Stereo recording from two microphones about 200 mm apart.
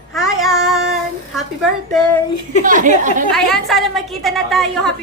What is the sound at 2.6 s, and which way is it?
Speech, 40° right (ahead or behind).